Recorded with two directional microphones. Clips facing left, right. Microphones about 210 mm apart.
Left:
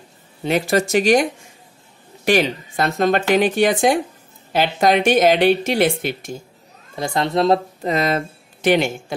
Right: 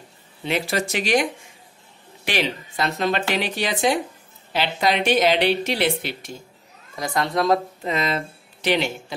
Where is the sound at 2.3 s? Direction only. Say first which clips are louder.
Left 8 dB; 45° left (ahead or behind).